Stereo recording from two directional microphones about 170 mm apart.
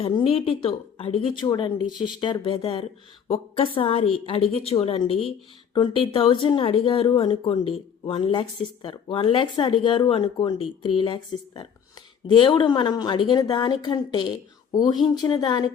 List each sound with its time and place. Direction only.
0.1 s a woman's voice: 30° left (ahead or behind)